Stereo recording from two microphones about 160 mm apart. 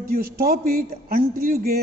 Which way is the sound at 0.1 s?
70° right (ahead or behind).